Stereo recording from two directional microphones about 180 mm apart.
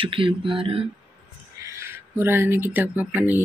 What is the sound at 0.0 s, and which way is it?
Speech, 30° right (ahead or behind).